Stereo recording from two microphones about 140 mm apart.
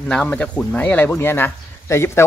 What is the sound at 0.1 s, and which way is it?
Speech, 5° left (ahead or behind).